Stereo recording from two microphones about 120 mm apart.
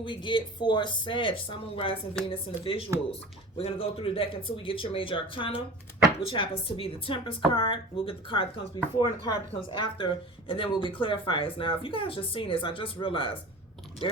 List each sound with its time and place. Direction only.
0.0 s a woman's voice: 40° left (ahead or behind)